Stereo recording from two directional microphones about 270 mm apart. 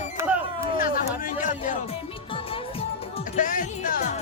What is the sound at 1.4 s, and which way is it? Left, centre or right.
Music, left.